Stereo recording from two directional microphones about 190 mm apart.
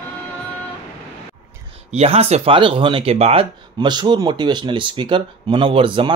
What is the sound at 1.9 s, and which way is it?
Speech, 35° right (ahead or behind).